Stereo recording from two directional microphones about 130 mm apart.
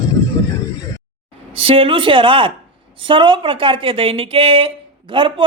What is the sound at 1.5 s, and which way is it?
Speech, 45° right (ahead or behind).